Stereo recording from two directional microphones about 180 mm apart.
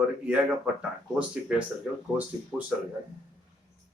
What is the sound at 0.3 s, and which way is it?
A man's voice, 5° right (ahead or behind).